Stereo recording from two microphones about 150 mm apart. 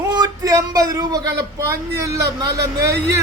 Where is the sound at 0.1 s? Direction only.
25° right (ahead or behind).